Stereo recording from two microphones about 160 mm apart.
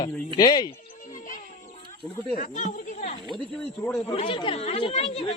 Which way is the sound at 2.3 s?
50° left (ahead or behind).